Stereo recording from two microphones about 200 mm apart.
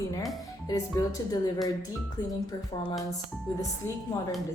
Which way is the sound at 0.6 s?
15° left (ahead or behind).